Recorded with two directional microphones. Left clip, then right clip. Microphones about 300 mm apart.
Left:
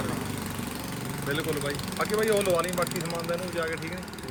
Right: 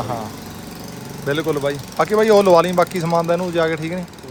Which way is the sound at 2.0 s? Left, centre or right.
Centre.